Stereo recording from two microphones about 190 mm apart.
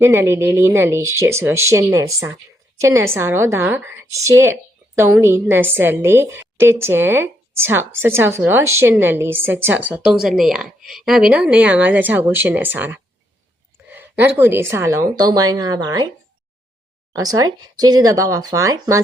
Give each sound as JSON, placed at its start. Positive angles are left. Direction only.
{"t": 0.0, "sound": "a woman's voice", "side_deg": -15}
{"t": 17.1, "sound": "speech", "side_deg": -20}